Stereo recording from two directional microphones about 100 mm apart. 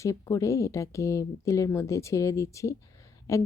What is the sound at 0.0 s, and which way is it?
Speech, 35° left (ahead or behind).